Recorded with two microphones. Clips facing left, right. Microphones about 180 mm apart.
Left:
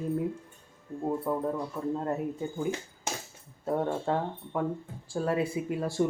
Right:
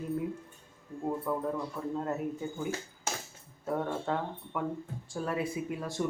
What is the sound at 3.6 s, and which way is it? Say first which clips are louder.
Speech: left 3 dB; 30° left (ahead or behind).